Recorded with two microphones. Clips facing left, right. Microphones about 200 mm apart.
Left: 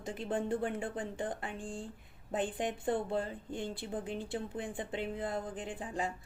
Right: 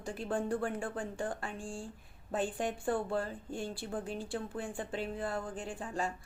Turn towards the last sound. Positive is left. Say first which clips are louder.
# even
turn(degrees=20)  # may be behind; listen again after turning